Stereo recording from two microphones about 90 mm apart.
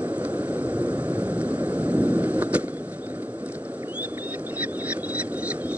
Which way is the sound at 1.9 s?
15° right (ahead or behind).